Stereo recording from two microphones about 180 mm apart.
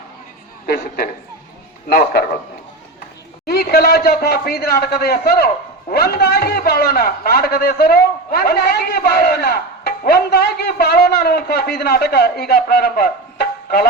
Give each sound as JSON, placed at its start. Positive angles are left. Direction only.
{"t": 3.4, "sound": "a man's voice", "side_deg": 60}